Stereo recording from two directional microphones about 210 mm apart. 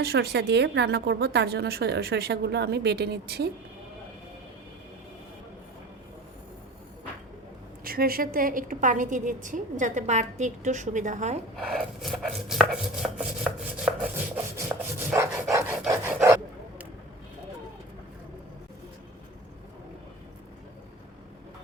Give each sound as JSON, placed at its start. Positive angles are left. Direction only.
{"t": 0.0, "sound": "a woman's voice", "side_deg": -50}
{"t": 7.9, "sound": "a woman's voice", "side_deg": -45}
{"t": 11.5, "sound": "chopping", "side_deg": 0}
{"t": 15.1, "sound": "dog", "side_deg": -10}